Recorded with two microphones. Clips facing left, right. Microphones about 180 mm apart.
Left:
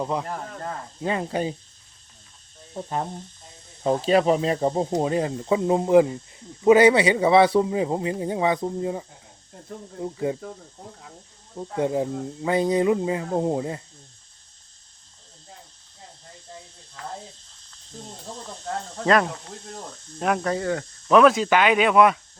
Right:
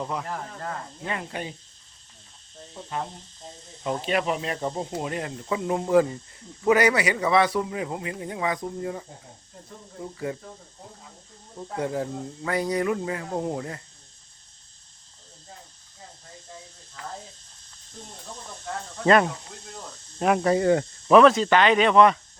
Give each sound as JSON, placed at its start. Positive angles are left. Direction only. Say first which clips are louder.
{"t": 0.0, "sound": "speech", "louder": "left 4 dB", "side_deg": 25}
{"t": 3.8, "sound": "speech", "louder": "left 7 dB", "side_deg": 35}
{"t": 11.5, "sound": "speech", "louder": "left 4 dB", "side_deg": 20}
{"t": 19.0, "sound": "speech", "louder": "right 1 dB", "side_deg": 0}
{"t": 21.1, "sound": "speech", "louder": "even", "side_deg": 0}